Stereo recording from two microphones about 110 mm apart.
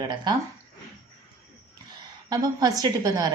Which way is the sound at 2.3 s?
35° right (ahead or behind).